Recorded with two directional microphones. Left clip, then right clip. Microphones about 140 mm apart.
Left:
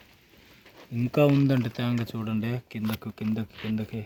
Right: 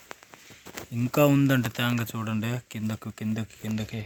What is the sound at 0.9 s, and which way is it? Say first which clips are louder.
Speech: right 1 dB; centre (ahead or behind).